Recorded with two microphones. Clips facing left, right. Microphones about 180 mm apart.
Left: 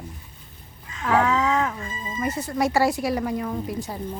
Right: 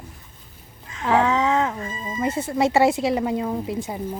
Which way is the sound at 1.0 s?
25° right (ahead or behind).